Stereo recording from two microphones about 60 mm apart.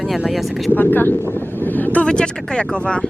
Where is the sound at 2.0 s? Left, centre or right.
Centre.